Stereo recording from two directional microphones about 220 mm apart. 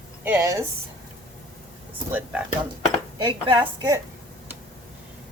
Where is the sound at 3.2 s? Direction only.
20° right (ahead or behind).